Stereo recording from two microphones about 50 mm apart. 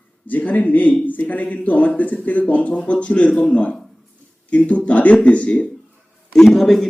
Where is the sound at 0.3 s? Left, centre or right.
Left.